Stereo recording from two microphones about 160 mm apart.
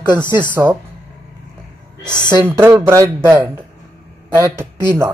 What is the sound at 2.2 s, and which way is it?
Speech, 15° right (ahead or behind).